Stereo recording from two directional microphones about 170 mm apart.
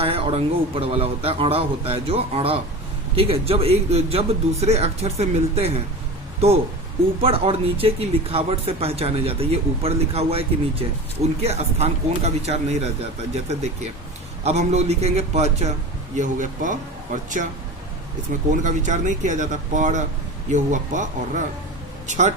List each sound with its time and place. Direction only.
0.0 s speech: 35° right (ahead or behind)
18.5 s speech: 50° right (ahead or behind)